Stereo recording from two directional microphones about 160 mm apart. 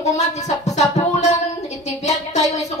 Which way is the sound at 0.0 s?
45° left (ahead or behind).